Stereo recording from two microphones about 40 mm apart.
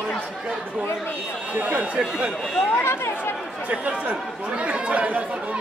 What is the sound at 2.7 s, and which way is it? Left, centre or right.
Speech, left.